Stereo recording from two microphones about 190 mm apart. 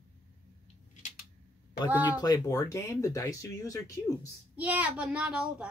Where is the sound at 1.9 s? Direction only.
10° right (ahead or behind).